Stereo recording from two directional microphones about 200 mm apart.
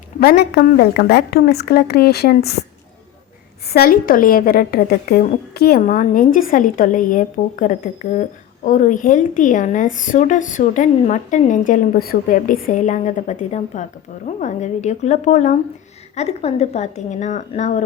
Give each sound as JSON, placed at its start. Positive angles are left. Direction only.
{"t": 0.2, "sound": "a woman's voice", "side_deg": 50}
{"t": 3.7, "sound": "a woman's voice", "side_deg": 50}